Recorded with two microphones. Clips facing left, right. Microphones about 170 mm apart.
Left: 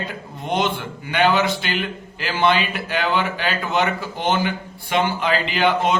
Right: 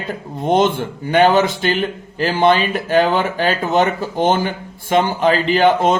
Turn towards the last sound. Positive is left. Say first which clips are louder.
# right 6 dB
turn(degrees=-45)  # may be behind; listen again after turning